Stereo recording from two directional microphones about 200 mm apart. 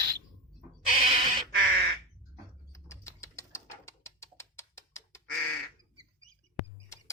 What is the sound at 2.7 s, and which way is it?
Bird, 15° left (ahead or behind).